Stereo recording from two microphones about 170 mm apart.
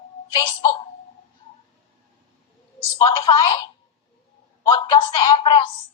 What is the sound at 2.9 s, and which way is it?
A woman's voice, 25° left (ahead or behind).